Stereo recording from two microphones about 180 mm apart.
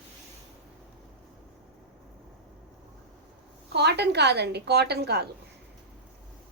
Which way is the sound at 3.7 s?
65° right (ahead or behind).